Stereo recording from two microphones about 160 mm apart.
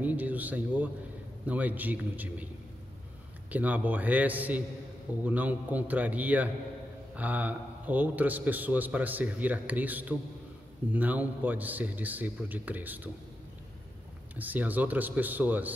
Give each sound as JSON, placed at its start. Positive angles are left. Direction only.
{"t": 0.0, "sound": "a man's voice", "side_deg": -10}
{"t": 3.4, "sound": "a man's voice", "side_deg": -10}
{"t": 14.3, "sound": "a man's voice", "side_deg": -10}